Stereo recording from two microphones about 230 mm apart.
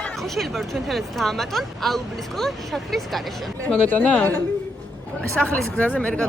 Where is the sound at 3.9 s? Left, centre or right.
Centre.